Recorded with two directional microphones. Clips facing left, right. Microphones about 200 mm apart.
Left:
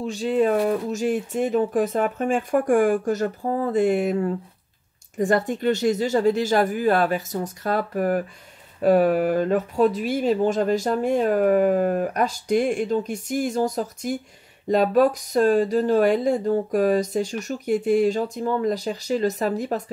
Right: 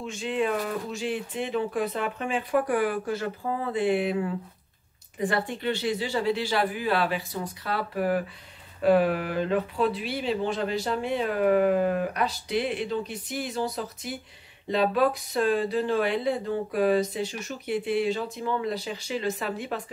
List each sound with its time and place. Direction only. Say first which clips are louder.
0.0 s speech: left 7 dB; 35° left (ahead or behind)